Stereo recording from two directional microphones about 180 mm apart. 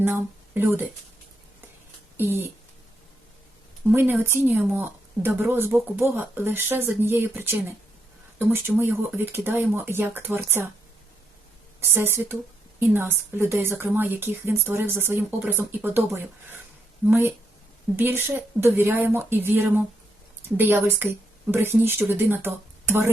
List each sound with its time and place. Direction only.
0.0 s speech: 10° right (ahead or behind)
2.1 s speech: 10° right (ahead or behind)
3.9 s speech: 10° right (ahead or behind)
11.8 s speech: 10° right (ahead or behind)